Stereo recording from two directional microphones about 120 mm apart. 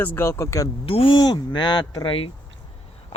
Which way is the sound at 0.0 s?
15° left (ahead or behind).